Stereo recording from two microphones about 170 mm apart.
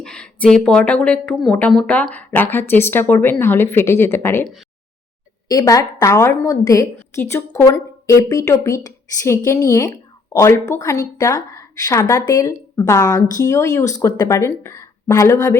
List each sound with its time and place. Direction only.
0.0 s speech: 5° left (ahead or behind)
5.5 s a woman's voice: 20° left (ahead or behind)